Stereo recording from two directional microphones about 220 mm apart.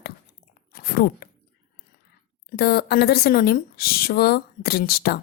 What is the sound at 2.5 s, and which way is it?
A woman's voice, 45° left (ahead or behind).